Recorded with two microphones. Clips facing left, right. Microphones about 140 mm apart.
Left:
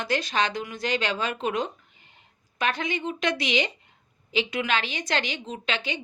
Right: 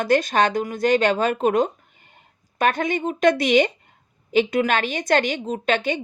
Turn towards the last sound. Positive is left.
turn(degrees=-50)  # may be behind; listen again after turning